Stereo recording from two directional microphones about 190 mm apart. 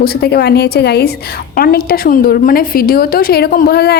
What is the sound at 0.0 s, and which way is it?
A woman's voice, 55° left (ahead or behind).